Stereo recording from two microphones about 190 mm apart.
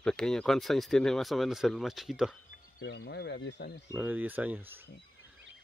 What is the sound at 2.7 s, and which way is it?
Speech, 65° left (ahead or behind).